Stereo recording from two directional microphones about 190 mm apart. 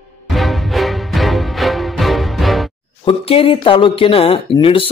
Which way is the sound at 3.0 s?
30° left (ahead or behind).